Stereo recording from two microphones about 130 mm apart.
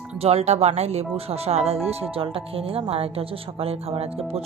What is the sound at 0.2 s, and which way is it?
Speech, 50° right (ahead or behind).